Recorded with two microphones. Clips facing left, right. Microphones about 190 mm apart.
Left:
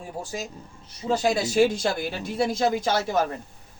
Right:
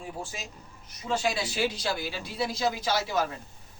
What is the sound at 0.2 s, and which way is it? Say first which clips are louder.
A man's voice: left 6 dB; 40° left (ahead or behind).